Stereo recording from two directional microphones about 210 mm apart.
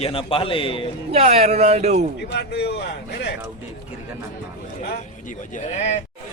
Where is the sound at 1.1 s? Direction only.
30° right (ahead or behind).